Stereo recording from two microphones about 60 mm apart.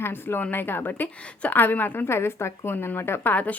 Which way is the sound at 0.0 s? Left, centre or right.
Left.